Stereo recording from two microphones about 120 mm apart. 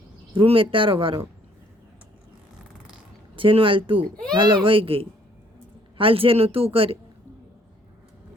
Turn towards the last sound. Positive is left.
turn(degrees=-50)  # may be behind; listen again after turning